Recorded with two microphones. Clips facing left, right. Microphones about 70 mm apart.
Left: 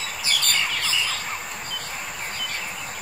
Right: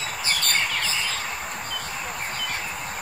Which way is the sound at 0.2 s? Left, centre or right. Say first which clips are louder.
Even; right.